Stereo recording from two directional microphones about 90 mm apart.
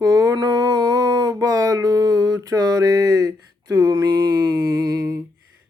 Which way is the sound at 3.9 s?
55° right (ahead or behind).